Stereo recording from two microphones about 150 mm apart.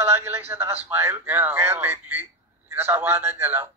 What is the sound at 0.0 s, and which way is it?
A man's voice, 15° right (ahead or behind).